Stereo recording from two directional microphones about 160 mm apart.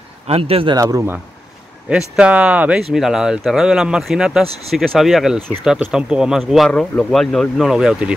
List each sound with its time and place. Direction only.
0.3 s speech: 35° right (ahead or behind)
0.7 s speech: 20° right (ahead or behind)
1.9 s speech: 5° right (ahead or behind)